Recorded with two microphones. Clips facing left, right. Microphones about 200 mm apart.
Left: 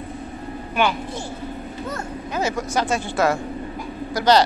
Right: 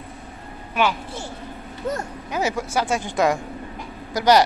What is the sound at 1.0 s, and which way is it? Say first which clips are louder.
Speech: left 3 dB; 15° left (ahead or behind).